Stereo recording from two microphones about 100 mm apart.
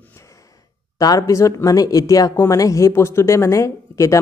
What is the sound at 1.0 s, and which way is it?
Speech, 40° left (ahead or behind).